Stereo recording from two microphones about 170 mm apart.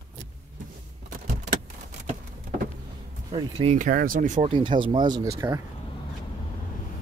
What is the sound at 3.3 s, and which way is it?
Speech, 30° right (ahead or behind).